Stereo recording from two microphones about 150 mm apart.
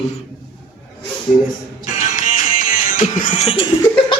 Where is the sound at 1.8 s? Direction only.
55° left (ahead or behind).